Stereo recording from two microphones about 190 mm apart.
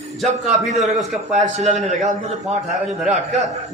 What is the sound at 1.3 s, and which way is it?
A man's voice, 35° right (ahead or behind).